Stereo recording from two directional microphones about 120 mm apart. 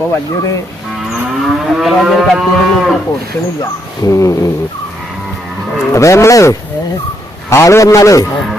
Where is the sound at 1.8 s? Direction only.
5° right (ahead or behind).